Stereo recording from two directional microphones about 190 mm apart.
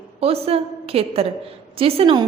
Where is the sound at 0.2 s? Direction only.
30° right (ahead or behind).